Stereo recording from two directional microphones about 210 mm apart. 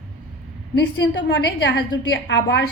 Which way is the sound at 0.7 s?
55° left (ahead or behind).